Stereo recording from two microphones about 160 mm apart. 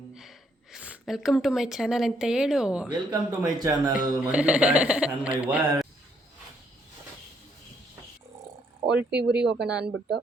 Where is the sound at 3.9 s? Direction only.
5° right (ahead or behind).